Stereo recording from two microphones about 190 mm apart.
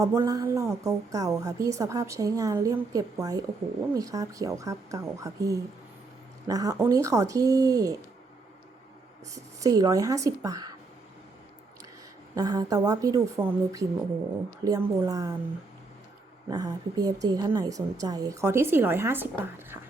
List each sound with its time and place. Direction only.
0.0 s a woman's voice: 15° right (ahead or behind)
9.3 s a woman's voice: 20° right (ahead or behind)
12.3 s speech: 20° right (ahead or behind)
16.5 s a woman's voice: 20° right (ahead or behind)